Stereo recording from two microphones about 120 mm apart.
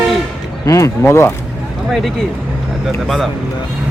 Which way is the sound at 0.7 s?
25° left (ahead or behind).